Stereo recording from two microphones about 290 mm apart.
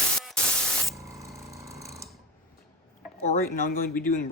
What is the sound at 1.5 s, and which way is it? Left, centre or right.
Ratchet, centre.